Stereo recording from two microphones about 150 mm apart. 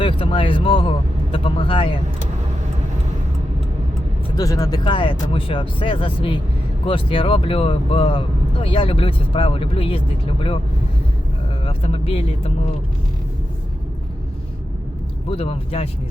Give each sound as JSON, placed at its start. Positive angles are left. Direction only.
{"t": 0.0, "sound": "speech", "side_deg": 35}
{"t": 4.4, "sound": "speech", "side_deg": 25}
{"t": 11.6, "sound": "speech", "side_deg": 40}
{"t": 15.3, "sound": "speech", "side_deg": 40}